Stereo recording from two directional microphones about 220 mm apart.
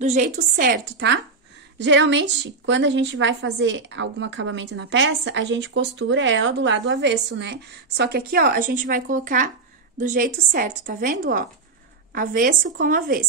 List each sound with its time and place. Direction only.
0.0 s a woman's voice: 35° right (ahead or behind)